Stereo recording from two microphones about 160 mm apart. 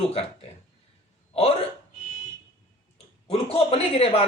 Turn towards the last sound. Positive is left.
turn(degrees=40)  # may be behind; listen again after turning